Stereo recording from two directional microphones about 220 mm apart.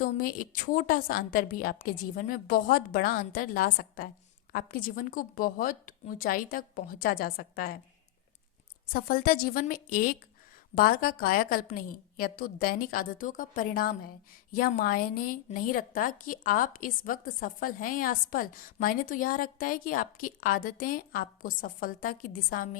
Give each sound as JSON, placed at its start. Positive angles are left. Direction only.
{"t": 0.0, "sound": "a woman's voice", "side_deg": 40}
{"t": 8.9, "sound": "a woman's voice", "side_deg": 40}